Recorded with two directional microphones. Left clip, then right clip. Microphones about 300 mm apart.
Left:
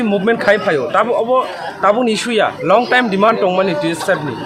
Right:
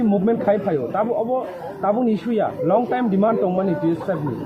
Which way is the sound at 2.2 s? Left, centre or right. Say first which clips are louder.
Left 7 dB; left.